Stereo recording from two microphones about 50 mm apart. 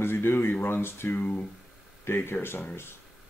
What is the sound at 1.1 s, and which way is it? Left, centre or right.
Speech, left.